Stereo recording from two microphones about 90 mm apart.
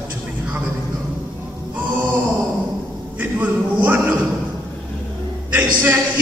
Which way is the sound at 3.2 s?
20° right (ahead or behind).